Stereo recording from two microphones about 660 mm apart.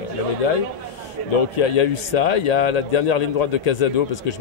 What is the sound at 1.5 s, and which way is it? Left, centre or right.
A man's voice, left.